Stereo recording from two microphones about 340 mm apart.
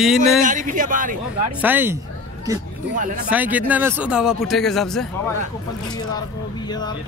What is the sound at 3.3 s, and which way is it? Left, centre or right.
Speech, centre.